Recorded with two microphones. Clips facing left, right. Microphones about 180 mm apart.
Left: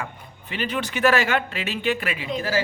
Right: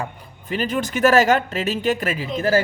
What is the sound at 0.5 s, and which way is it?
A woman's voice, 45° right (ahead or behind).